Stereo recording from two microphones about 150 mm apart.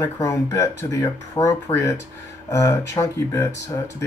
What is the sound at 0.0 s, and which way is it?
Speech, 20° left (ahead or behind).